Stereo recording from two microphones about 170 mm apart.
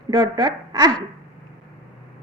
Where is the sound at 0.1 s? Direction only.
20° right (ahead or behind).